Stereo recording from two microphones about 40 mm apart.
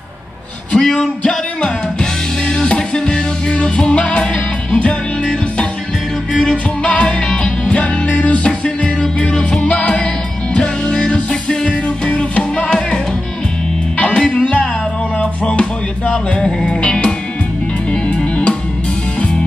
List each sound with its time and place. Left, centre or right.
0.7 s music: centre
13.9 s music: left